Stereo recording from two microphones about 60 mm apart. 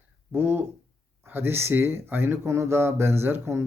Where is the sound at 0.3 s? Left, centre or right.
Right.